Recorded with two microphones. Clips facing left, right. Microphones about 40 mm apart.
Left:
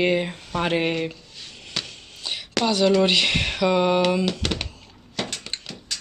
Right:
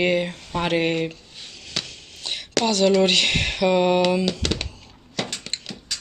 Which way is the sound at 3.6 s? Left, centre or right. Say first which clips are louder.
Right 1 dB; right.